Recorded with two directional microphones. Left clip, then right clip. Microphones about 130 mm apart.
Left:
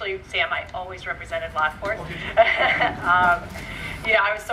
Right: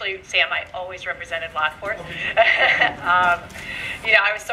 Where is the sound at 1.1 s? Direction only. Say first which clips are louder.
Right 2 dB; 25° right (ahead or behind).